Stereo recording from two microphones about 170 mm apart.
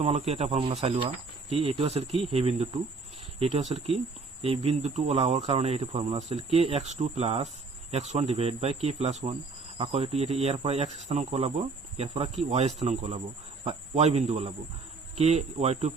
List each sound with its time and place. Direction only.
0.0 s speech: 40° right (ahead or behind)